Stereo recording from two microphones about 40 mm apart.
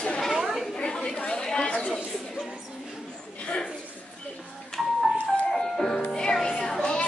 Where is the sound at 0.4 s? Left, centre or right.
Centre.